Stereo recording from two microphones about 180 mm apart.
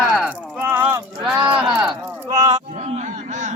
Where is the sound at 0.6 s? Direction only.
15° right (ahead or behind).